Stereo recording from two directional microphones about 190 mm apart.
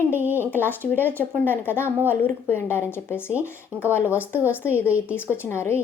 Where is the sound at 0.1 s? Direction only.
10° right (ahead or behind).